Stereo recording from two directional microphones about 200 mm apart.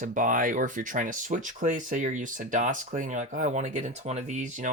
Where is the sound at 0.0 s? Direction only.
40° right (ahead or behind).